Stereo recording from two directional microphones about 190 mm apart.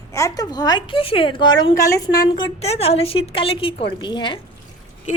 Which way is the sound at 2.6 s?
30° left (ahead or behind).